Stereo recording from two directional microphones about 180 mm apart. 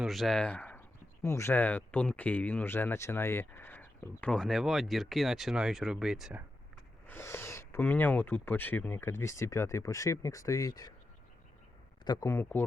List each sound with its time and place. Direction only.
0.0 s speech: centre (ahead or behind)
7.1 s speech: 15° left (ahead or behind)
12.0 s speech: 20° left (ahead or behind)